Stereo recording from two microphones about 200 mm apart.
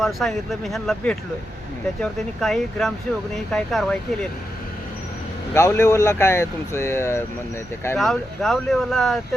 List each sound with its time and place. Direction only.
0.0 s speech: centre (ahead or behind)
5.5 s speech: 15° left (ahead or behind)
7.9 s speech: centre (ahead or behind)